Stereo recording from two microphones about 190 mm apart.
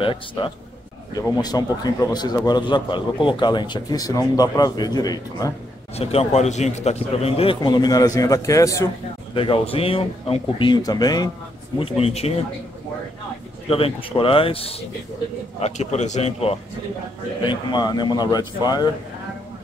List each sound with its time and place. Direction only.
0.0 s a man's voice: 25° left (ahead or behind)
5.9 s a man's voice: 35° left (ahead or behind); by 8.8 s 15° left (ahead or behind)
9.3 s a man's voice: 30° left (ahead or behind)
12.0 s speech: 30° left (ahead or behind)
13.7 s a man's voice: 30° left (ahead or behind)